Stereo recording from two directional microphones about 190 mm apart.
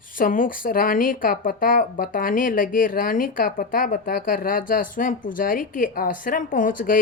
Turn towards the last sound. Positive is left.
turn(degrees=45)  # may be behind; listen again after turning